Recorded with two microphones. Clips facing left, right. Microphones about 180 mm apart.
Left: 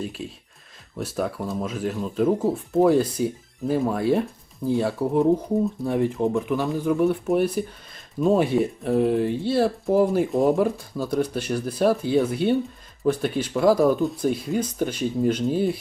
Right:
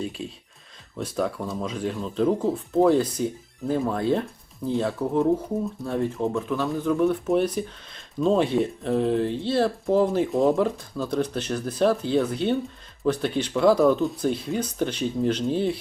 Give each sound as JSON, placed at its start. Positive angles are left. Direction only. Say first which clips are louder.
{"t": 0.0, "sound": "speech", "louder": "even", "side_deg": 0}
{"t": 5.8, "sound": "speech", "louder": "left 3 dB", "side_deg": 15}